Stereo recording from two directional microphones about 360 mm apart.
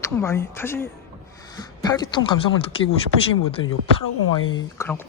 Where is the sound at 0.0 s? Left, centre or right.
Centre.